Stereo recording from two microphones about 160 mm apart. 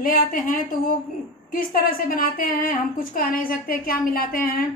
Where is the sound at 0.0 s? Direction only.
60° left (ahead or behind).